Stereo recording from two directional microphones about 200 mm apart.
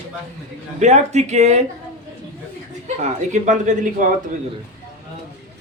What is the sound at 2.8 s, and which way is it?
A woman's voice, 35° right (ahead or behind).